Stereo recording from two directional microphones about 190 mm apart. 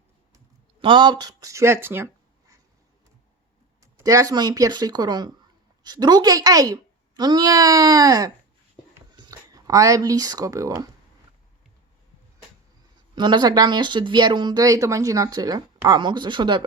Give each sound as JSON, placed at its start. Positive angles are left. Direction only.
{"t": 0.3, "sound": "speech", "side_deg": -25}
{"t": 3.8, "sound": "speech", "side_deg": -15}
{"t": 13.1, "sound": "speech", "side_deg": -25}